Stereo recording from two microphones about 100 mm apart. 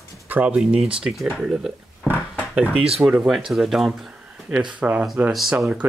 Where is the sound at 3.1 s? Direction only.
15° right (ahead or behind).